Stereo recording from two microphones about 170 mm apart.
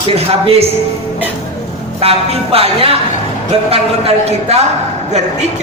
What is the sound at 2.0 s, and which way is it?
Speech, 35° right (ahead or behind).